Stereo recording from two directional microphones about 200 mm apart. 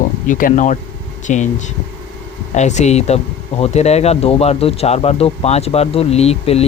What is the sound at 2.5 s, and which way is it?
Speech, 35° left (ahead or behind).